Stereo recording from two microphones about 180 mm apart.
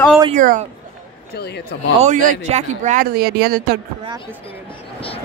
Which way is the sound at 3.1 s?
60° right (ahead or behind).